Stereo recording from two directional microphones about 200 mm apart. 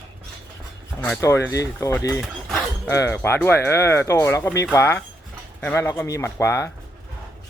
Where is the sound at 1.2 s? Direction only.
15° left (ahead or behind).